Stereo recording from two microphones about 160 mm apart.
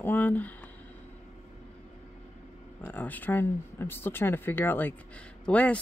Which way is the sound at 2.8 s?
10° left (ahead or behind).